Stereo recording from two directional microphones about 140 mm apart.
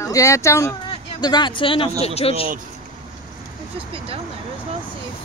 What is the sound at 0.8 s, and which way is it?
Speech, 30° left (ahead or behind).